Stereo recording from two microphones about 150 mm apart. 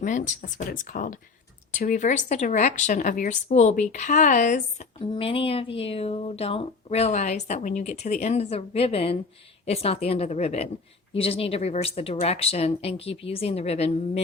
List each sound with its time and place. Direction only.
0.0 s speech: 60° left (ahead or behind)
4.9 s speech: 35° left (ahead or behind)